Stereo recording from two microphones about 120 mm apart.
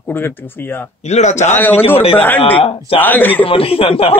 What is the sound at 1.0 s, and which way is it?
Speech, 70° left (ahead or behind).